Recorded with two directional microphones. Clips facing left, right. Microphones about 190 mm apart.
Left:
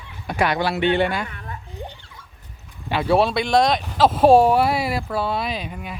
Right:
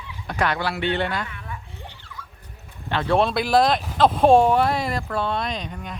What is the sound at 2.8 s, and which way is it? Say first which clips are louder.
Speech: left 2 dB; 10° left (ahead or behind).